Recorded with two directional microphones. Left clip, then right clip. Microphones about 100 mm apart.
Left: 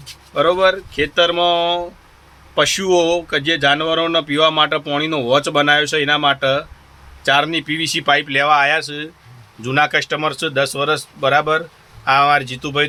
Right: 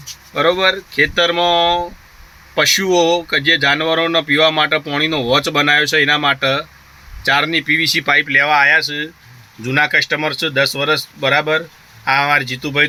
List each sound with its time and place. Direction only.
0.3 s speech: 20° right (ahead or behind)